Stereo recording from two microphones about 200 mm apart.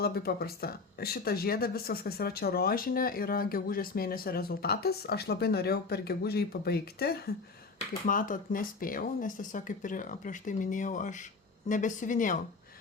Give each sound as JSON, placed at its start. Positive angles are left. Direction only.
{"t": 0.0, "sound": "speech", "side_deg": 50}